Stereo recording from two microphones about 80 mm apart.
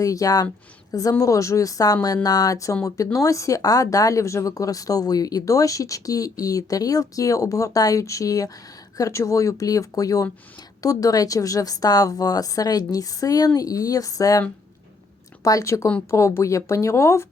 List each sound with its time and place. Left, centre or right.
0.0 s a woman's voice: left
15.4 s speech: left